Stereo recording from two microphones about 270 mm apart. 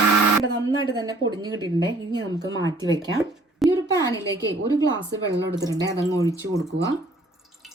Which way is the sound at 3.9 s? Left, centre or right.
Centre.